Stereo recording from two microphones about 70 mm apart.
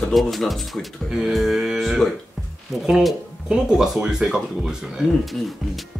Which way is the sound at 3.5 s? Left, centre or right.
Centre.